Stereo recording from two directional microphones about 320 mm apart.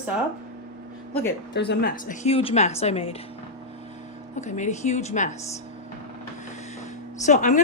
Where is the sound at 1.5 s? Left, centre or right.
Left.